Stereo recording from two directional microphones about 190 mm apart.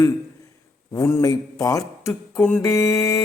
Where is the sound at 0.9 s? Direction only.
15° left (ahead or behind).